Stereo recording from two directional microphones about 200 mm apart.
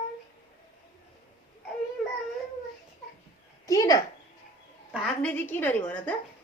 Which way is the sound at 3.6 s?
15° left (ahead or behind).